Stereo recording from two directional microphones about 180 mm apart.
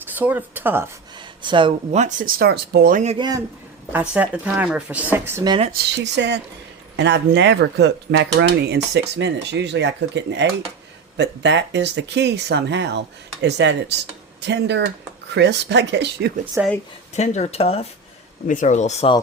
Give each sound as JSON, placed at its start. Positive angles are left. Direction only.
{"t": 0.0, "sound": "speech", "side_deg": -10}
{"t": 1.2, "sound": "a sound", "side_deg": -25}
{"t": 1.9, "sound": "speech", "side_deg": -40}
{"t": 3.2, "sound": "speech", "side_deg": -20}
{"t": 3.9, "sound": "speech", "side_deg": -5}
{"t": 5.7, "sound": "speech", "side_deg": -70}
{"t": 16.6, "sound": "speech", "side_deg": -10}
{"t": 17.2, "sound": "speech", "side_deg": 40}